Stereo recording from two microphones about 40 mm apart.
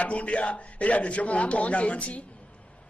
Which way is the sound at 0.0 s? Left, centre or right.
Left.